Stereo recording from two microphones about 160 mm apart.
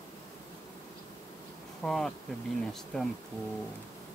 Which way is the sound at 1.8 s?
5° left (ahead or behind).